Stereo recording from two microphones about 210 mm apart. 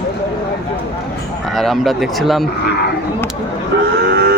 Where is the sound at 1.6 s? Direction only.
Centre (ahead or behind).